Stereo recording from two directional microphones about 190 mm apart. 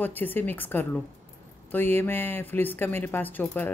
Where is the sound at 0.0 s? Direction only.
10° left (ahead or behind).